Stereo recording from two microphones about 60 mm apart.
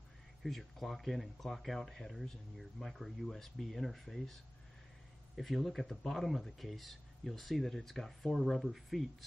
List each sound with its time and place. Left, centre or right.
0.4 s speech: centre